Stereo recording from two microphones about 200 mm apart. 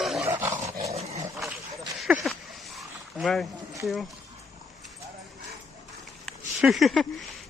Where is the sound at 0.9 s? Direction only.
30° right (ahead or behind).